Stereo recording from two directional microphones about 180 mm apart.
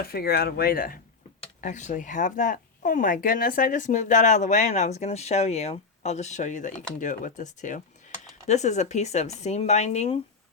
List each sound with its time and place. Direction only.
0.0 s speech: 55° left (ahead or behind)
1.6 s speech: 40° left (ahead or behind)